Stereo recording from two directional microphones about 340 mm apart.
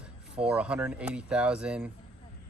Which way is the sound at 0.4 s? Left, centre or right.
Centre.